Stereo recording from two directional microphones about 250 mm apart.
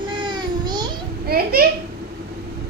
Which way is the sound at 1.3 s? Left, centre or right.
Right.